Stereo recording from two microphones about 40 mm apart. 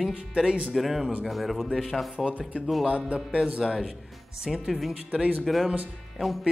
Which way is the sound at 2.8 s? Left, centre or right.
Right.